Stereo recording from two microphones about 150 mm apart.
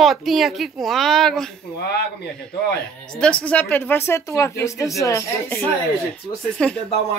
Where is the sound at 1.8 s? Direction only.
90° left.